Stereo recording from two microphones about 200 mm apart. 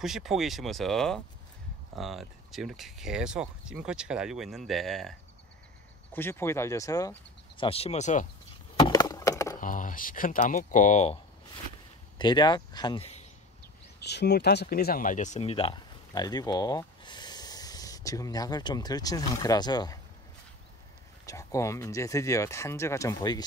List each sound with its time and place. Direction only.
0.0 s speech: centre (ahead or behind)
6.1 s speech: 10° left (ahead or behind); by 8.3 s 35° left (ahead or behind)
8.7 s a sound: 20° left (ahead or behind)
9.6 s speech: 40° left (ahead or behind)
12.2 s speech: 20° left (ahead or behind)
14.0 s speech: 55° left (ahead or behind); by 20.0 s 20° left (ahead or behind)
21.3 s speech: 15° left (ahead or behind)